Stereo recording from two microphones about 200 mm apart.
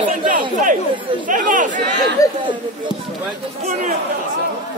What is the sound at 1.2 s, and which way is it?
Speech, 40° right (ahead or behind).